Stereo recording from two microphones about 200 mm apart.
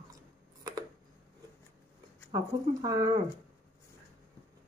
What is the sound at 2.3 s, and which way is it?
Speech, 15° right (ahead or behind).